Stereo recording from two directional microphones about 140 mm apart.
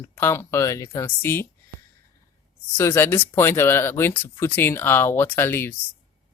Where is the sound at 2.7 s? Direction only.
20° left (ahead or behind).